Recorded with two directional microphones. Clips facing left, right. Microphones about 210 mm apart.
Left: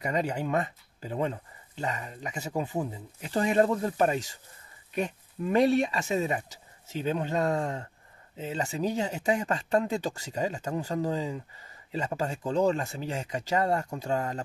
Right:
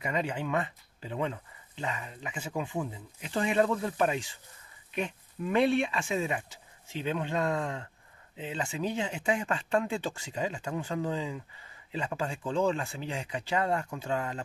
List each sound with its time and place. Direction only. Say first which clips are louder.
0.0 s speech: left 3 dB; 40° left (ahead or behind)